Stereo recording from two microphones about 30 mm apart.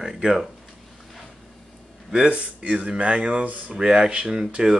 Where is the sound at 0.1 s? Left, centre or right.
Right.